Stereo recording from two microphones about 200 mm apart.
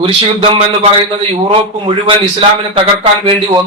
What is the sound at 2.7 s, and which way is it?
Speech, 25° right (ahead or behind).